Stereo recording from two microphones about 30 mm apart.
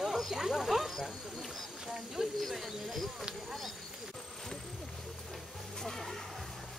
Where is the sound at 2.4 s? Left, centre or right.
Centre.